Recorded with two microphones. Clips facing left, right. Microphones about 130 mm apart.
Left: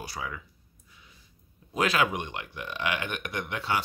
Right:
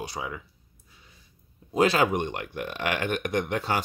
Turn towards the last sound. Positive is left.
turn(degrees=-45)  # may be behind; listen again after turning